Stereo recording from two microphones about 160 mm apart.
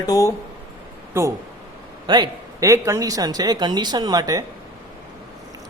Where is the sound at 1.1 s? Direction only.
15° right (ahead or behind).